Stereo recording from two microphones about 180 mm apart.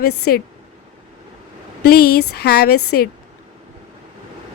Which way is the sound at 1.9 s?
60° left (ahead or behind).